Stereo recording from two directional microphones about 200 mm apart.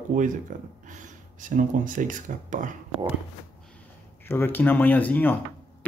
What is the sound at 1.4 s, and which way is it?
Speech, 40° right (ahead or behind).